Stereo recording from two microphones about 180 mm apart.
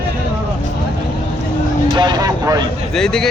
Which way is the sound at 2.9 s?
5° left (ahead or behind).